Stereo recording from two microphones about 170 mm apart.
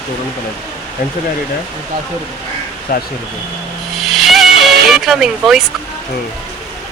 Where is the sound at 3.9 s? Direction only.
Centre (ahead or behind).